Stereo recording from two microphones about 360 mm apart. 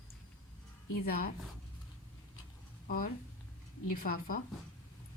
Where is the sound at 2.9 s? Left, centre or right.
Left.